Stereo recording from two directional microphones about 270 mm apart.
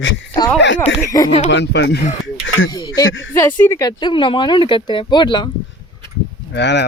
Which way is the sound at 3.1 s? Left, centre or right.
Left.